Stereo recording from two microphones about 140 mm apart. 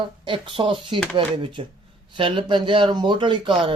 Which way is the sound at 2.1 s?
35° right (ahead or behind).